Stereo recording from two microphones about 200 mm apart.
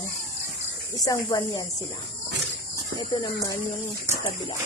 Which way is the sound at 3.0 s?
20° left (ahead or behind).